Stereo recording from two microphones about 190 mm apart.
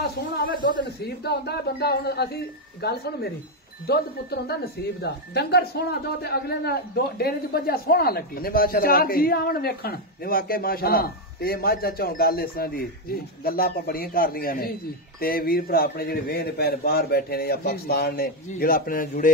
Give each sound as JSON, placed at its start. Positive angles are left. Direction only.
{"t": 0.0, "sound": "speech", "side_deg": 50}